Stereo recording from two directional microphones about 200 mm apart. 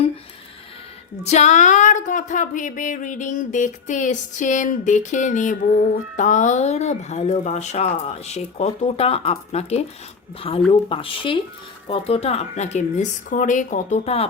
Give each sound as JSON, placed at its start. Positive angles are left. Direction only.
{"t": 1.2, "sound": "speech", "side_deg": 35}